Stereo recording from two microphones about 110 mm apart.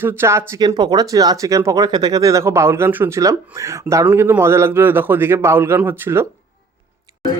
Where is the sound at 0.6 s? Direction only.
40° right (ahead or behind); by 6.2 s 20° right (ahead or behind).